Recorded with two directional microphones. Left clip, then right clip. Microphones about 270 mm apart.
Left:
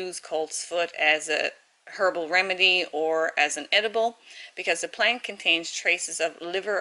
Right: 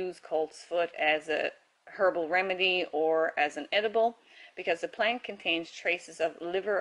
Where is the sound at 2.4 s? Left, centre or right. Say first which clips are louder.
Left 6 dB; centre.